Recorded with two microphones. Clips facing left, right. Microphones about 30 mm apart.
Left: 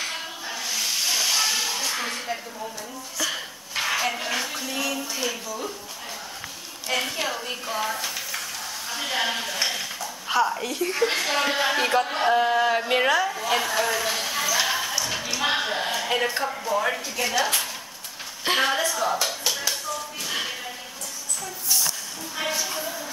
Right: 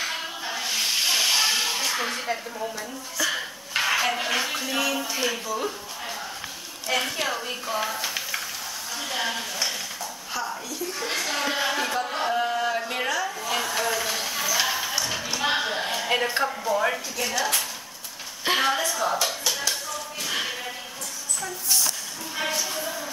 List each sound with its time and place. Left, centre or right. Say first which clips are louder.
0.0 s hiss: right 2 dB; centre
2.0 s a sound: right 2 dB; centre
3.8 s speech: right 1 dB; centre
6.9 s a woman's voice: right 1 dB; centre
8.9 s speech: left 3 dB; centre
10.3 s a woman's voice: left 9 dB; left
10.9 s speech: left 4 dB; centre
14.4 s basketball bounce: left 1 dB; centre
15.2 s a sound: left 1 dB; centre
16.4 s a woman's voice: even; centre
19.5 s a sound: left 1 dB; centre
22.4 s a woman's voice: even; centre